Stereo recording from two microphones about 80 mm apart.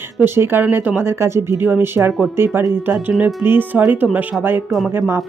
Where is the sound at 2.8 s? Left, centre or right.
Right.